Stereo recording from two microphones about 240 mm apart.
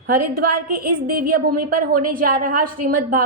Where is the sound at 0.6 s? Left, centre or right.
Right.